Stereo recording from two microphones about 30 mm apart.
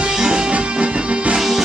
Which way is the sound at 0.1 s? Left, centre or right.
Right.